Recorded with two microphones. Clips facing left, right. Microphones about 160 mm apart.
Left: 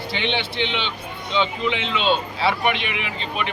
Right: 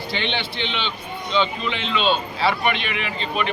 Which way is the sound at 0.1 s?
15° left (ahead or behind).